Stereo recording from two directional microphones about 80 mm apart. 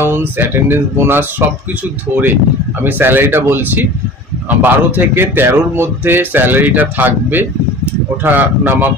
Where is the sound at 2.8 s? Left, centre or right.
Right.